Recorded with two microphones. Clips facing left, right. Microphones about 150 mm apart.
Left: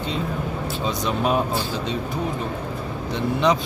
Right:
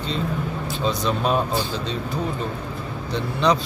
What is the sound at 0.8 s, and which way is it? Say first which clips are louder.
Speech: right 1 dB; 15° left (ahead or behind).